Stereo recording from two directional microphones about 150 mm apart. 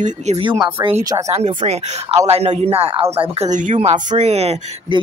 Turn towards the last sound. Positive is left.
turn(degrees=-45)  # may be behind; listen again after turning